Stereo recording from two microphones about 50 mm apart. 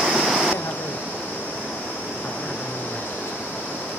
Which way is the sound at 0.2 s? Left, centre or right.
Centre.